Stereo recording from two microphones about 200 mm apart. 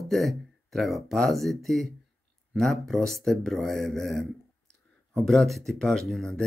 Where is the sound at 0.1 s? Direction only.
Centre (ahead or behind).